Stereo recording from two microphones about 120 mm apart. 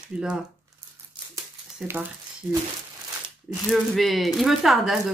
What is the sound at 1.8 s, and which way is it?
Speech, 5° right (ahead or behind).